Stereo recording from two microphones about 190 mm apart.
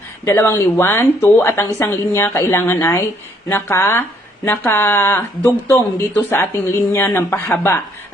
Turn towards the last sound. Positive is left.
turn(degrees=15)  # may be behind; listen again after turning